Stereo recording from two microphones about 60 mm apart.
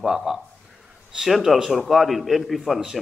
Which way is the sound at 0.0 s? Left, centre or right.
Centre.